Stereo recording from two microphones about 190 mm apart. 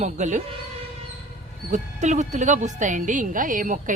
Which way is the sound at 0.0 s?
40° right (ahead or behind).